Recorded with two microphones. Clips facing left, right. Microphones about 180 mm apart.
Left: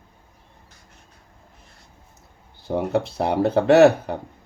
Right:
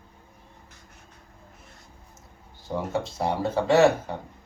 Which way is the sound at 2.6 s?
65° left (ahead or behind).